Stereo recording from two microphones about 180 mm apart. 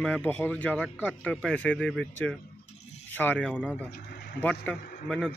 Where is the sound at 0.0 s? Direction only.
5° left (ahead or behind).